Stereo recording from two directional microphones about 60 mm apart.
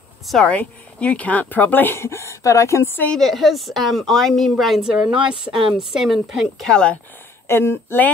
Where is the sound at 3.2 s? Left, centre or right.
Centre.